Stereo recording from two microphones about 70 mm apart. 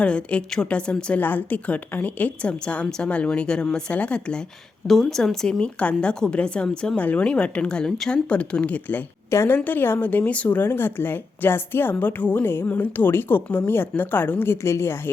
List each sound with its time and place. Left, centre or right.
0.0 s a woman's voice: centre
1.2 s a woman's voice: left
4.9 s a woman's voice: centre; by 9.0 s left
9.3 s a woman's voice: left
9.6 s a woman's voice: left
10.6 s a woman's voice: left